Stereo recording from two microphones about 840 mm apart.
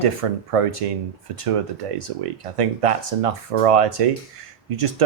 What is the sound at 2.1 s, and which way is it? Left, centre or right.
Speech, right.